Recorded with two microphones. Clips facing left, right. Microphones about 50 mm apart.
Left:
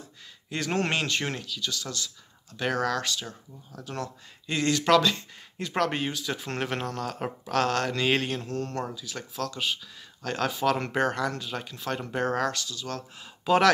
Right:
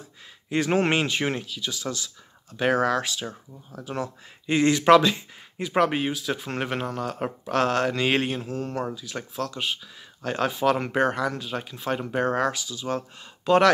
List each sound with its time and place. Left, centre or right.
0.5 s speech: centre
13.2 s speech: centre